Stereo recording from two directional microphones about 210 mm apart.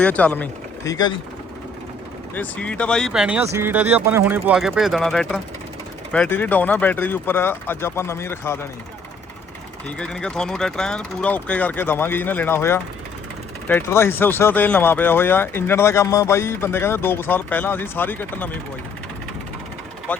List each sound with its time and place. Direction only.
0.0 s speech: 5° left (ahead or behind)
0.9 s speech: 20° left (ahead or behind)
2.3 s speech: 5° left (ahead or behind)
10.0 s speech: 5° left (ahead or behind)
20.1 s speech: 10° left (ahead or behind)